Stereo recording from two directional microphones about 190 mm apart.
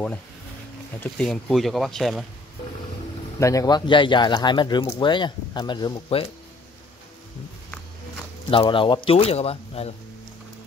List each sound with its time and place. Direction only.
1.0 s speech: 5° left (ahead or behind)
3.3 s speech: 15° left (ahead or behind)
8.5 s speech: 25° left (ahead or behind)